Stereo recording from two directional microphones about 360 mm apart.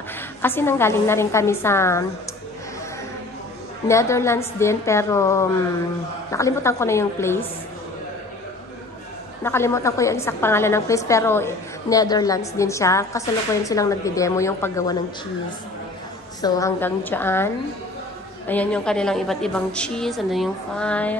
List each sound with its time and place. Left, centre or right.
0.4 s a woman's voice: centre
3.8 s a woman's voice: centre
9.4 s a woman's voice: centre
16.3 s a woman's voice: centre
18.5 s a woman's voice: centre